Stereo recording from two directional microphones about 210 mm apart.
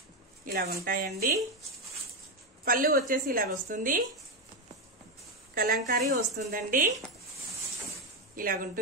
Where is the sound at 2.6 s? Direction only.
45° right (ahead or behind).